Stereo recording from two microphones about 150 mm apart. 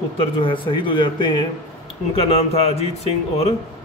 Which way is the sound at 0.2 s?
35° left (ahead or behind).